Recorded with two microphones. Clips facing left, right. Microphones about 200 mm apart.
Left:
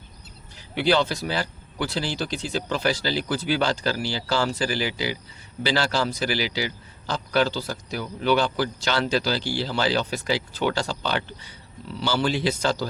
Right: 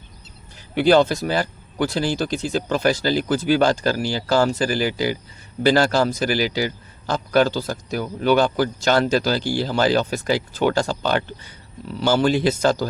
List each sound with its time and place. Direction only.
0.8 s a man's voice: 45° right (ahead or behind)